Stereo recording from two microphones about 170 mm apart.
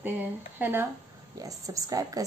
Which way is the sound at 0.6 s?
10° right (ahead or behind).